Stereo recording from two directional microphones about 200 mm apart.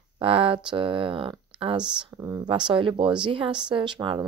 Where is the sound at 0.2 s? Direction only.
25° right (ahead or behind).